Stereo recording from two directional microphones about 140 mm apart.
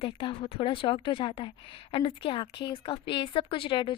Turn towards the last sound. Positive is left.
turn(degrees=35)  # may be behind; listen again after turning